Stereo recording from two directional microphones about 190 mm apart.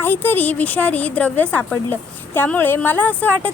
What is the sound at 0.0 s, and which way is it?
A woman's voice, 10° left (ahead or behind).